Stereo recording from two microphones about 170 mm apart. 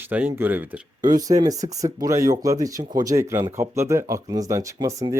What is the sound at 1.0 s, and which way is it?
Speech, 25° right (ahead or behind).